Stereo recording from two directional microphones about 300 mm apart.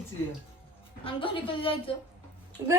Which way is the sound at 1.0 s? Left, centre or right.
Centre.